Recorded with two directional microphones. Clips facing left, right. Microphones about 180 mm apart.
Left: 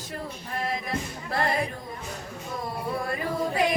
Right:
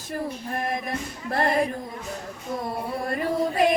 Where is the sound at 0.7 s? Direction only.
50° right (ahead or behind).